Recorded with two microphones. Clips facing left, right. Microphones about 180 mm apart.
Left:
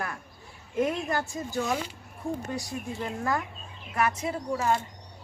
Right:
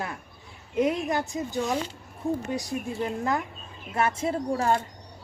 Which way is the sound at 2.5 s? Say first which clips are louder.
Right 4 dB; 20° right (ahead or behind).